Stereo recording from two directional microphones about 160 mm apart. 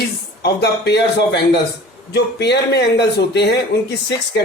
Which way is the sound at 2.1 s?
90° left.